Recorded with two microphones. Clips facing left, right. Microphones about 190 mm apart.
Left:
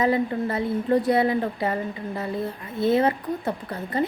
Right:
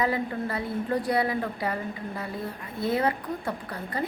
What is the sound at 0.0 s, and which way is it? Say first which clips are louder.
A woman's voice: left 5 dB; 20° left (ahead or behind).